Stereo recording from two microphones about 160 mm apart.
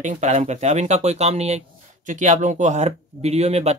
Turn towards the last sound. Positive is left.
turn(degrees=-40)  # may be behind; listen again after turning